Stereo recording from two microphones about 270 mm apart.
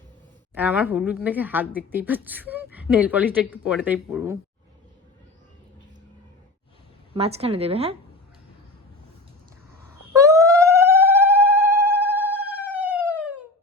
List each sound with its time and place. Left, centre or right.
0.5 s a woman's voice: centre
7.1 s a woman's voice: right
10.2 s dog: centre
12.7 s police car: centre